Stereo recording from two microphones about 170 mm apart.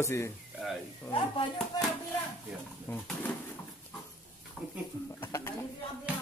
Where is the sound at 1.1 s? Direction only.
10° left (ahead or behind).